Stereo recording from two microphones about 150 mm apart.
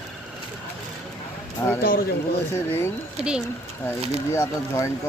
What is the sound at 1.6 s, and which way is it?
Speech, 20° left (ahead or behind).